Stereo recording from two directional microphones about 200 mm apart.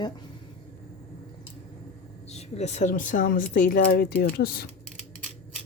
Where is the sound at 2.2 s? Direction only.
35° left (ahead or behind).